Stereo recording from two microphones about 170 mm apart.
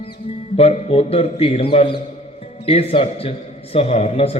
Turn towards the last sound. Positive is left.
turn(degrees=35)  # may be behind; listen again after turning